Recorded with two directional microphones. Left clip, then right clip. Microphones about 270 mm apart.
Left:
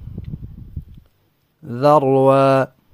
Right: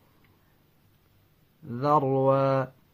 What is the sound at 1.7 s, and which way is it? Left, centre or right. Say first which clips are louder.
Mantra: left 10 dB; left.